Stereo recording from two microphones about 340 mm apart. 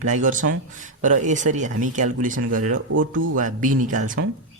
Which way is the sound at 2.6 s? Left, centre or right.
Right.